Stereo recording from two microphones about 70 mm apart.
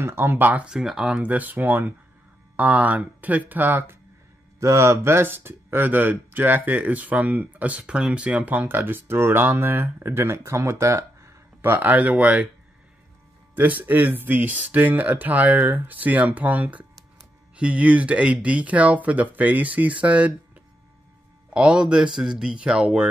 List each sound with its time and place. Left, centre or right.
0.0 s speech: right
0.7 s speech: centre
1.2 s speech: right
4.6 s speech: right; by 12.4 s centre
13.6 s speech: right
21.5 s speech: centre